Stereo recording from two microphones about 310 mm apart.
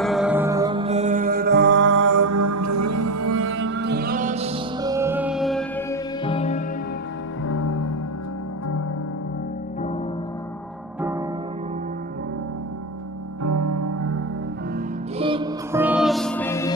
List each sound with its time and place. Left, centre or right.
0.0 s music: centre; by 2.0 s right
2.0 s music: right; by 5.9 s centre
6.2 s music: centre
7.4 s music: left
13.4 s music: right
15.1 s music: centre